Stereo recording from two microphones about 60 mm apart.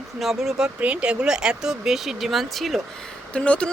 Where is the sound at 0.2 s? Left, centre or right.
Centre.